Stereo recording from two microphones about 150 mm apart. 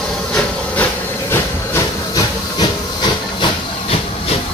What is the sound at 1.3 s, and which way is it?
Hiss, 20° left (ahead or behind).